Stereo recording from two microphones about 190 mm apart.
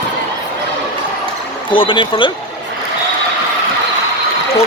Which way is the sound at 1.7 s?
25° left (ahead or behind).